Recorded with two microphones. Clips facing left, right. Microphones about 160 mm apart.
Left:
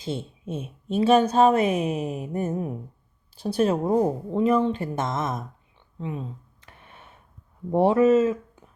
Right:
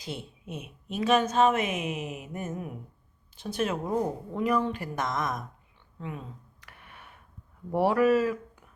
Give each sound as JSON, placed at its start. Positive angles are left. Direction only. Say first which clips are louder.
{"t": 0.0, "sound": "a woman's voice", "louder": "left 7 dB", "side_deg": 25}
{"t": 6.0, "sound": "a sound", "louder": "left 6 dB", "side_deg": 25}
{"t": 7.7, "sound": "speech", "louder": "left 5 dB", "side_deg": 25}